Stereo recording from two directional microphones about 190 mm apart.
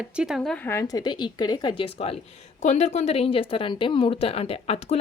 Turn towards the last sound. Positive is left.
turn(degrees=35)  # may be behind; listen again after turning